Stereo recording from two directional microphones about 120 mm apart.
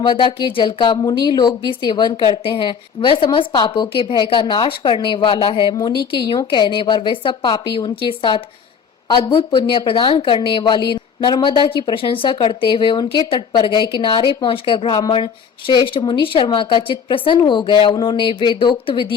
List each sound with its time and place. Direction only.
0.0 s speech: 40° left (ahead or behind)